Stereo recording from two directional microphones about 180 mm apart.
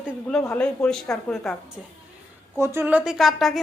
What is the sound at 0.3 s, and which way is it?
A woman's voice, 5° left (ahead or behind).